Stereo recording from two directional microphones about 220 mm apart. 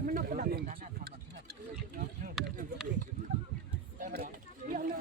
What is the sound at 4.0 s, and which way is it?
Run, 40° right (ahead or behind).